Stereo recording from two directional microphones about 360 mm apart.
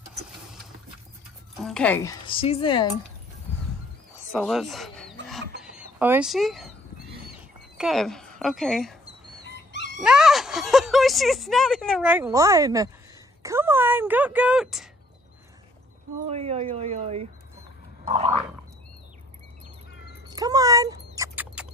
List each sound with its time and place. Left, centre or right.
1.6 s speech: centre
4.3 s speech: centre
5.6 s chicken: centre
7.7 s speech: centre
9.4 s dog: left
10.0 s speech: centre
16.3 s speech: centre
18.0 s a sound: centre
20.2 s cat: centre